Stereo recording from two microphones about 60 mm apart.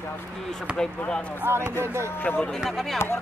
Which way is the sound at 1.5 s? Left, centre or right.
Right.